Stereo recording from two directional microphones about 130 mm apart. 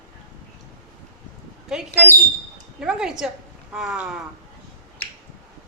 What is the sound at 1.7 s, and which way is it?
A woman's voice, 5° right (ahead or behind).